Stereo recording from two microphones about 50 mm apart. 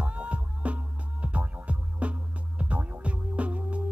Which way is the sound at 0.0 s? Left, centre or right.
Right.